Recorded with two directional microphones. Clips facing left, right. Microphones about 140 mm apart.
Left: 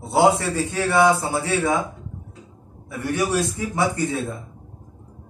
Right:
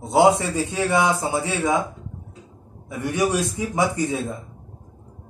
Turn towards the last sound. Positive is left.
turn(degrees=-15)  # may be behind; listen again after turning